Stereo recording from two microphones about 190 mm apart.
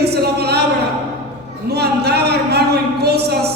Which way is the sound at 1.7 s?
60° right (ahead or behind).